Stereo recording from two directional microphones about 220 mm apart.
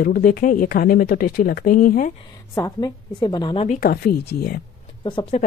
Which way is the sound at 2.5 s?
15° left (ahead or behind).